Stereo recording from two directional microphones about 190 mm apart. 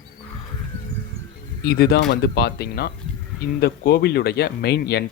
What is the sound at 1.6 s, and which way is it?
Speech, 55° left (ahead or behind).